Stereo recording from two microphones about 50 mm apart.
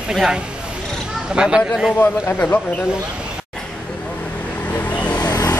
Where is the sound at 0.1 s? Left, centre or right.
Centre.